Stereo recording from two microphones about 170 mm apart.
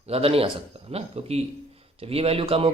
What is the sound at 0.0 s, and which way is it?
A man's voice, 35° right (ahead or behind).